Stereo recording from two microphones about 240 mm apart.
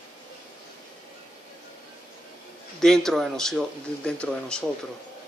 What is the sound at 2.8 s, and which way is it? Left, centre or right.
Speech, centre.